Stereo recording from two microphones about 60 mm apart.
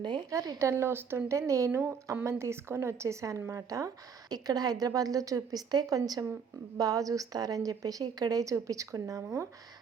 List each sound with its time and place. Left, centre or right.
0.3 s speech: right
1.7 s speech: right
8.5 s speech: right